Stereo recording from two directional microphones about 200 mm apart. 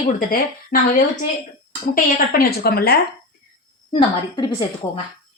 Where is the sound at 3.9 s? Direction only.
25° left (ahead or behind).